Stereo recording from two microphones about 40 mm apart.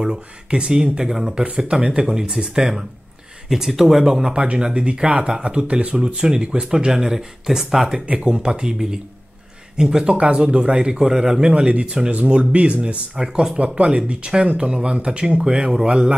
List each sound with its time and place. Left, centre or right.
0.0 s speech: right
4.4 s a man's voice: right
6.1 s a man's voice: right
8.1 s a man's voice: right
12.1 s speech: right
13.2 s speech: centre
13.6 s a man's voice: right